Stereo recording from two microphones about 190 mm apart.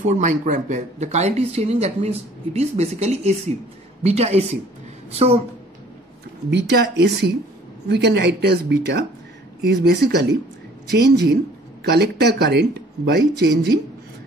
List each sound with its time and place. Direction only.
0.0 s speech: 40° right (ahead or behind)
6.5 s speech: 60° right (ahead or behind)